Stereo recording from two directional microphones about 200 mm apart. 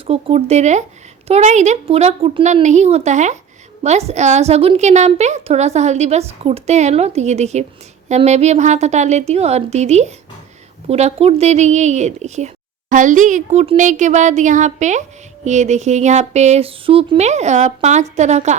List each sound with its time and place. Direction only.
0.1 s a woman's voice: 30° right (ahead or behind)